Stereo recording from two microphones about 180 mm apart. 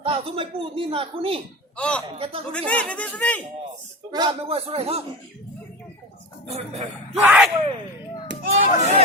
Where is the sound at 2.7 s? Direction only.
5° left (ahead or behind).